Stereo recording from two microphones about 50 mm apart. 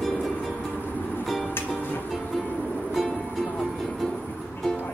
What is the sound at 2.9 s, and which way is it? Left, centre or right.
Music, centre.